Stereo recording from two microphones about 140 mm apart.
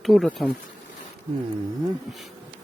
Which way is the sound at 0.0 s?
Centre (ahead or behind).